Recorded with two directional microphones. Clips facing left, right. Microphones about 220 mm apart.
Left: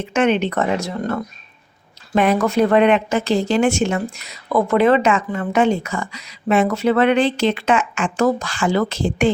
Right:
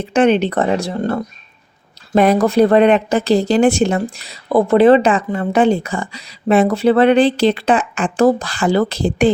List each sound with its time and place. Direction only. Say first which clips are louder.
0.0 s speech: right 4 dB; 35° right (ahead or behind)